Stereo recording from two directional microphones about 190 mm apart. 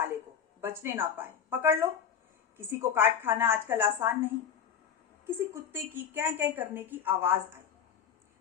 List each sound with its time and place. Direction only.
0.6 s a woman's voice: 10° right (ahead or behind)
5.7 s a woman's voice: 10° right (ahead or behind)